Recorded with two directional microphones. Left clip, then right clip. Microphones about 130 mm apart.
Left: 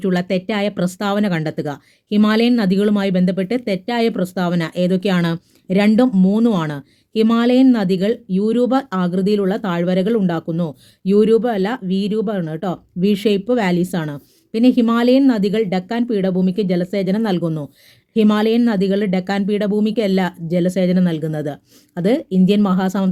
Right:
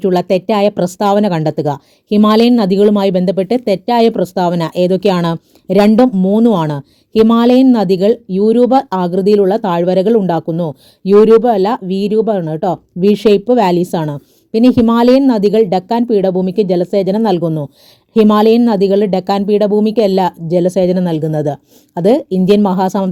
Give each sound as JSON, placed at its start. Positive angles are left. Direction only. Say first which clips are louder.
{"t": 0.0, "sound": "a woman's voice", "louder": "right 8 dB", "side_deg": -40}
{"t": 18.1, "sound": "a woman's voice", "louder": "right 7 dB", "side_deg": -40}